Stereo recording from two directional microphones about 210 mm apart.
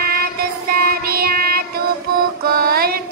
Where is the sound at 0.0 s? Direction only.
45° right (ahead or behind).